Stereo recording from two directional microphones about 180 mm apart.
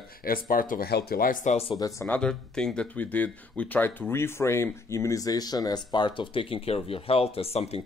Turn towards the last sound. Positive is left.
turn(degrees=35)  # may be behind; listen again after turning